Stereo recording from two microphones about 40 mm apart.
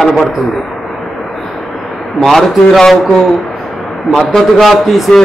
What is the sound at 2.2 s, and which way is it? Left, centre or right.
Speech, centre.